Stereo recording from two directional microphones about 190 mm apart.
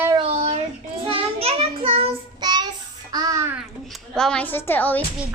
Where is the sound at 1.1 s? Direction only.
30° right (ahead or behind).